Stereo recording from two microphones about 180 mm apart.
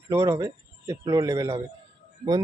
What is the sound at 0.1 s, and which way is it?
A man's voice, 15° right (ahead or behind).